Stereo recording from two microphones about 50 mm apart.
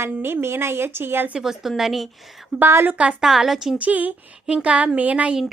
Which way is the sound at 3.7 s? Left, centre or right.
Right.